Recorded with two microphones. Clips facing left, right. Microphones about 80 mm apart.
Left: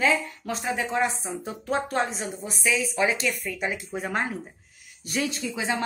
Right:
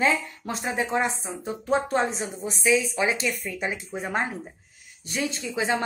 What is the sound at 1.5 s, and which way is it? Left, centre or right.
A woman's voice, centre.